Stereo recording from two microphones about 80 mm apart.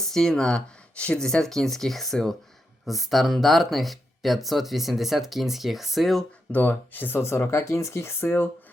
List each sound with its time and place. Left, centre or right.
0.0 s speech: centre
6.5 s speech: left